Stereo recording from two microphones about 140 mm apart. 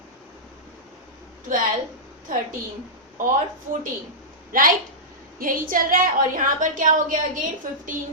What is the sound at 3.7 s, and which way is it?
Speech, 65° right (ahead or behind).